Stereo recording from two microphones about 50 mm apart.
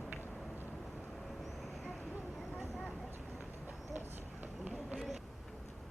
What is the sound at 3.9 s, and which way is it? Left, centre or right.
Clip-clop, right.